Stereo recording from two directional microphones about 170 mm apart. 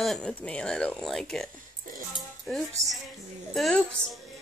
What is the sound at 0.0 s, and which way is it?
A woman's voice, 5° left (ahead or behind).